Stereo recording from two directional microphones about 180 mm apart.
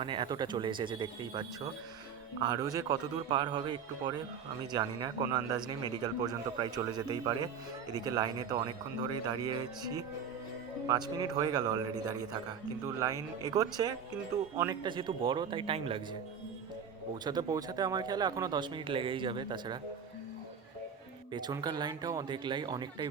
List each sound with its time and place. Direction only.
0.0 s speech: 25° right (ahead or behind)
17.2 s speech: 20° right (ahead or behind)
21.3 s speech: 20° right (ahead or behind)